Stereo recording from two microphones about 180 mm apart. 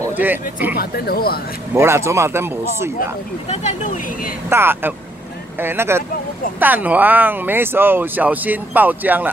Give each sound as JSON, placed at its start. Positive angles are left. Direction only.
{"t": 0.0, "sound": "speech", "side_deg": -10}
{"t": 0.7, "sound": "speech", "side_deg": 55}
{"t": 1.7, "sound": "speech", "side_deg": -15}
{"t": 3.4, "sound": "speech", "side_deg": 40}
{"t": 4.5, "sound": "speech", "side_deg": -15}